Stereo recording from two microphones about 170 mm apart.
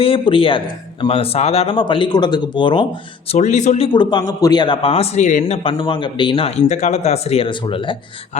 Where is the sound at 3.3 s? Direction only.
45° left (ahead or behind).